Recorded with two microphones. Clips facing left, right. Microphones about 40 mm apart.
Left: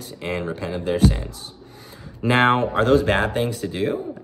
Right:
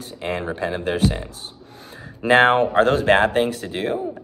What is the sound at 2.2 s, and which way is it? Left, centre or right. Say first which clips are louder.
Speech: right 3 dB; right.